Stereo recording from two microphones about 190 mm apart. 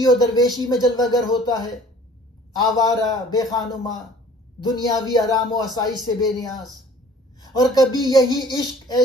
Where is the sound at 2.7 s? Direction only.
20° left (ahead or behind).